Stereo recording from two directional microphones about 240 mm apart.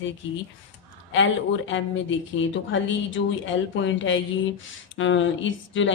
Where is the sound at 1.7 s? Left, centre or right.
Left.